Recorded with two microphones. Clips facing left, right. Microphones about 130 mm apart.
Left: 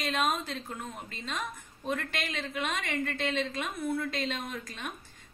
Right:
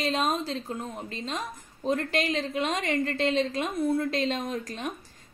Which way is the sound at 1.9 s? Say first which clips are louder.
Right 7 dB; 35° right (ahead or behind).